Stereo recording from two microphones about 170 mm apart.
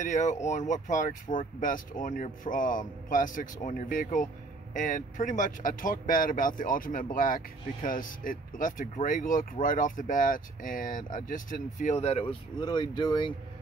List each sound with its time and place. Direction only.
0.0 s speech: 45° left (ahead or behind); by 13.3 s 25° left (ahead or behind)